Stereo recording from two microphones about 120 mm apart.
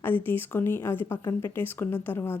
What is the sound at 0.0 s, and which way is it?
Speech, 15° left (ahead or behind).